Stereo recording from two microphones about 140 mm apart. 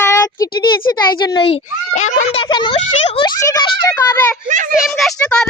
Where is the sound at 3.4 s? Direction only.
25° left (ahead or behind).